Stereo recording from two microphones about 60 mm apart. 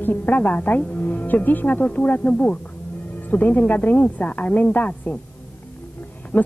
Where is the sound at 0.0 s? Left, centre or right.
Left.